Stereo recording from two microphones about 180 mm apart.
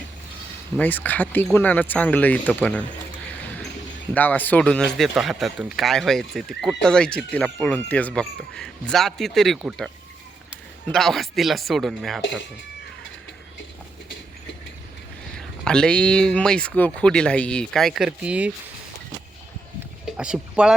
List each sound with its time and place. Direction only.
0.8 s speech: 10° left (ahead or behind)
4.1 s speech: 10° left (ahead or behind)
10.9 s speech: centre (ahead or behind)
15.4 s speech: 5° left (ahead or behind)
20.1 s speech: 5° right (ahead or behind)